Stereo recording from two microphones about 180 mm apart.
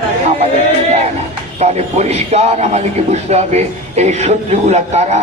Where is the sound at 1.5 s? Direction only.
35° right (ahead or behind).